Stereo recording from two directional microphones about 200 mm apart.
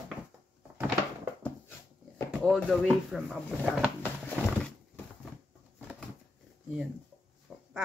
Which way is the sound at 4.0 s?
10° left (ahead or behind).